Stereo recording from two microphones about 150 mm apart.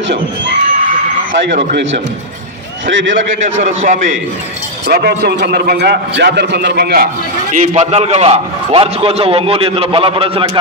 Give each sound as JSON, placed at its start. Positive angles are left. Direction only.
{"t": 3.3, "sound": "a man's voice", "side_deg": -55}
{"t": 4.8, "sound": "a man's voice", "side_deg": -90}
{"t": 7.5, "sound": "a man's voice", "side_deg": -55}